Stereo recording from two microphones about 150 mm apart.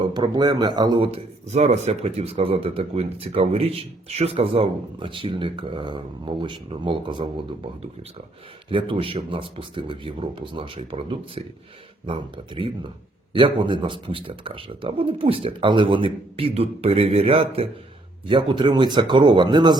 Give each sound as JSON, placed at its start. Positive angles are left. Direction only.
{"t": 0.0, "sound": "a man's voice", "side_deg": -30}
{"t": 8.7, "sound": "a man's voice", "side_deg": -35}